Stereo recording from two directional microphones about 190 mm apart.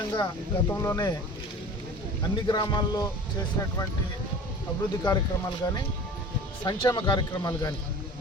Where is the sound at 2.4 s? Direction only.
20° left (ahead or behind).